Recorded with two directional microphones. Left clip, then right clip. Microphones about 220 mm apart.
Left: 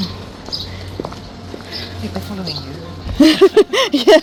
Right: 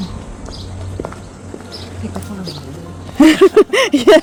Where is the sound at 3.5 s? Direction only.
25° right (ahead or behind).